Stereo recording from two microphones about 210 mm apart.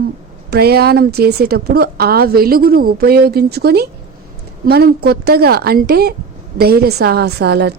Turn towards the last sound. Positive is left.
turn(degrees=-50)  # may be behind; listen again after turning